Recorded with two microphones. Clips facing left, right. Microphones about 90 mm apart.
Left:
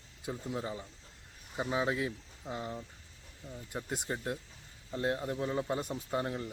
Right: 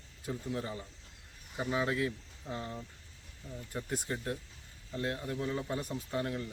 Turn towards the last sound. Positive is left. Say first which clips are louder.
# left 1 dB
turn(degrees=25)  # may be behind; listen again after turning